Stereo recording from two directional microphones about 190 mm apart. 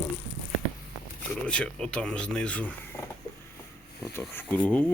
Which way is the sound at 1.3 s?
5° left (ahead or behind).